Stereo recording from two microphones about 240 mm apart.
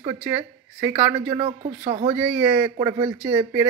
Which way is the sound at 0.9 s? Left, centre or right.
Right.